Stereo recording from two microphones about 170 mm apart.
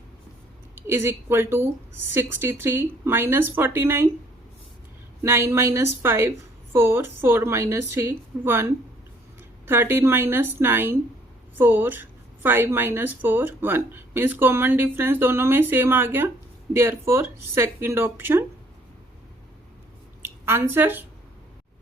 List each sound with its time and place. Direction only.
0.8 s a woman's voice: 15° right (ahead or behind)
5.2 s a woman's voice: 15° right (ahead or behind)
20.2 s speech: 15° right (ahead or behind)